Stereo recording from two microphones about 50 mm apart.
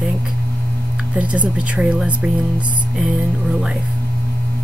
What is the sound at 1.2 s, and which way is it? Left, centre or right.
Speech, right.